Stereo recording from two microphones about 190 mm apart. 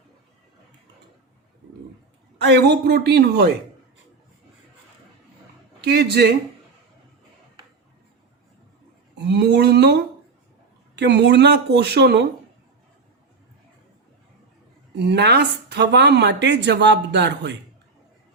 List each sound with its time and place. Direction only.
2.4 s speech: 65° right (ahead or behind)
5.8 s speech: 60° right (ahead or behind)
9.1 s a sound: 65° right (ahead or behind)
10.9 s speech: 65° right (ahead or behind)
14.9 s speech: 60° right (ahead or behind)